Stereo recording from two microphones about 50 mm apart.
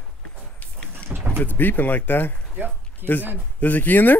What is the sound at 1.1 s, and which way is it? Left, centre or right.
Vehicle, right.